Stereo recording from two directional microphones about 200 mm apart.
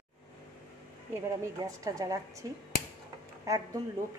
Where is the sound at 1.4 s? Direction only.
15° right (ahead or behind).